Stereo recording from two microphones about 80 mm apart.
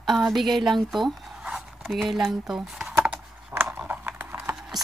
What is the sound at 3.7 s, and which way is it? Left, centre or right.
Computer keyboard, right.